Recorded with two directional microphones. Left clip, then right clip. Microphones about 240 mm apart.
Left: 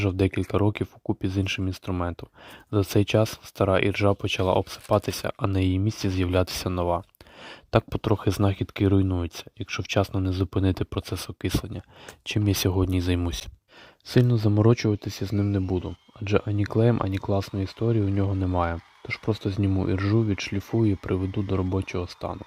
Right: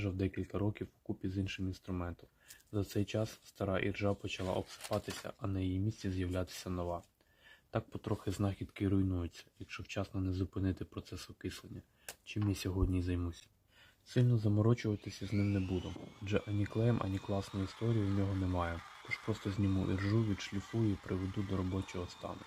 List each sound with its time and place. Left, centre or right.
0.0 s speech: left